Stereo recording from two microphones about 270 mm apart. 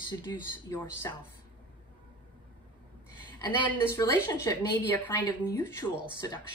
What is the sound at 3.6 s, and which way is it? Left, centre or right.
Speech, centre.